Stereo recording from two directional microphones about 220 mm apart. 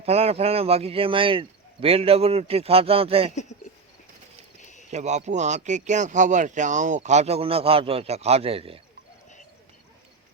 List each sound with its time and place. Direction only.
0.0 s speech: 30° right (ahead or behind)
4.6 s a sound: 35° left (ahead or behind)
4.9 s speech: 30° right (ahead or behind)